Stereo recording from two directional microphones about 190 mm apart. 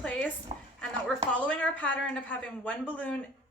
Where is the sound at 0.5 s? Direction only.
30° right (ahead or behind).